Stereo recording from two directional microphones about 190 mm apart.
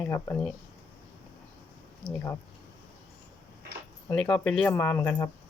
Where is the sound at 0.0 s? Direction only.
10° left (ahead or behind).